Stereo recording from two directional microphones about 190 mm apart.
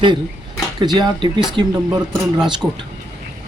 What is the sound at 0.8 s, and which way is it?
Speech, 25° right (ahead or behind).